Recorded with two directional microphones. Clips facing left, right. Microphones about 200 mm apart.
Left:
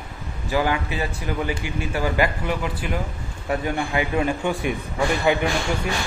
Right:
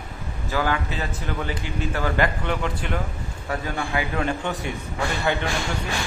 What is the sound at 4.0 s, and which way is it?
Speech, 15° left (ahead or behind).